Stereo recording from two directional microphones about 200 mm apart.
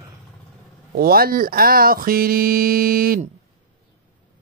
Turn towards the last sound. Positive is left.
turn(degrees=-45)  # may be behind; listen again after turning